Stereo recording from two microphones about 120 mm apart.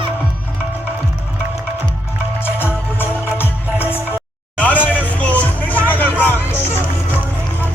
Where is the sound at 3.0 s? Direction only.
20° left (ahead or behind).